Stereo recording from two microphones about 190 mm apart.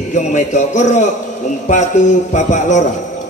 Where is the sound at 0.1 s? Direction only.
40° left (ahead or behind).